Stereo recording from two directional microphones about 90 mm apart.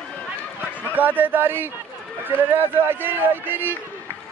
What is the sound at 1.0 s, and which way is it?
A man's voice, 20° right (ahead or behind).